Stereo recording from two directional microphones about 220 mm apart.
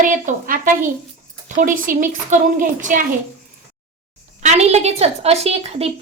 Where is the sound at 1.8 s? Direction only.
40° right (ahead or behind).